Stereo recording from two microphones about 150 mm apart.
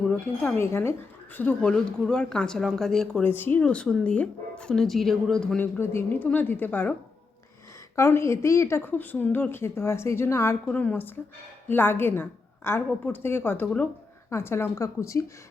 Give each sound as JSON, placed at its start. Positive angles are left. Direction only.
{"t": 0.1, "sound": "speech", "side_deg": 10}
{"t": 7.9, "sound": "a woman's voice", "side_deg": 20}